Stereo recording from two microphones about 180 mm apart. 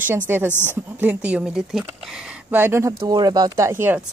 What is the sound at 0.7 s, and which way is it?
A woman's voice, 10° right (ahead or behind).